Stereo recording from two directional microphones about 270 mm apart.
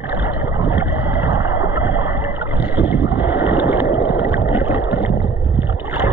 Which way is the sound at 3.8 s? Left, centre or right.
Left.